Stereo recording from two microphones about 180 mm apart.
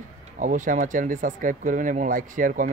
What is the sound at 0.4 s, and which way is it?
Speech, 45° right (ahead or behind).